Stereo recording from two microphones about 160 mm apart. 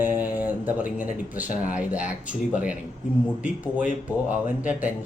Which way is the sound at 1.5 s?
55° left (ahead or behind).